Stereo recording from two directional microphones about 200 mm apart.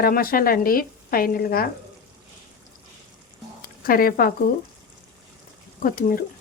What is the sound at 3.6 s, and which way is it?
Speech, 45° left (ahead or behind).